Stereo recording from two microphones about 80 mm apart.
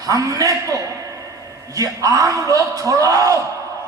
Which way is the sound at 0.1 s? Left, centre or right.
Right.